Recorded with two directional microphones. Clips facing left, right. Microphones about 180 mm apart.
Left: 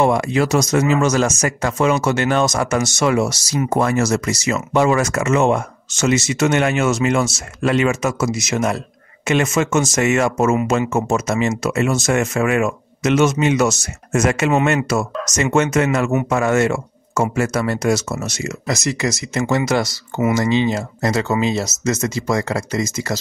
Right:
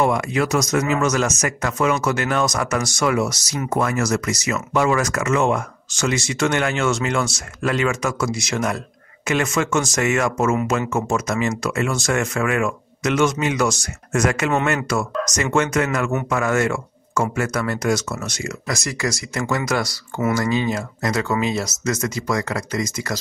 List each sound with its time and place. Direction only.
0.0 s speech: 30° left (ahead or behind)